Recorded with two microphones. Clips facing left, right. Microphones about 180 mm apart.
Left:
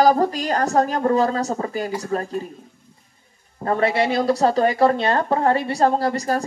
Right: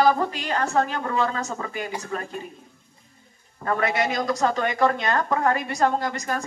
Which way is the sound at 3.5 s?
30° left (ahead or behind).